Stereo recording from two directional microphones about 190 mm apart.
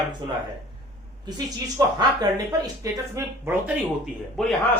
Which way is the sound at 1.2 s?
20° right (ahead or behind).